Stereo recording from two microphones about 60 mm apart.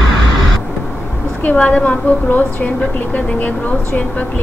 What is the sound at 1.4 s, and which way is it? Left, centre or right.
Speech, left.